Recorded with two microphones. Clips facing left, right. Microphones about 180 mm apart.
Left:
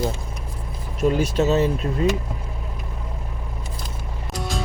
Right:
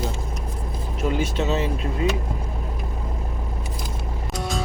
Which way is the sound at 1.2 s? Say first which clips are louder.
Left 4 dB; 40° left (ahead or behind).